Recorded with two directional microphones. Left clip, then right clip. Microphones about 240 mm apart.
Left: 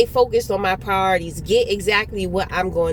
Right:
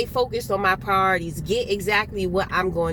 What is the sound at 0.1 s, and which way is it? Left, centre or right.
Speech, centre.